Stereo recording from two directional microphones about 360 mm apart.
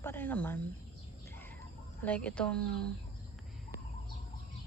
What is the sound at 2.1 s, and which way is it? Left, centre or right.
Speech, centre.